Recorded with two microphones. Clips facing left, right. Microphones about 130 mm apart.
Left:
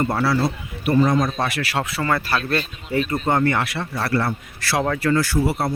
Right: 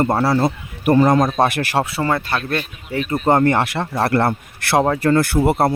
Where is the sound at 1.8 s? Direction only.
25° right (ahead or behind).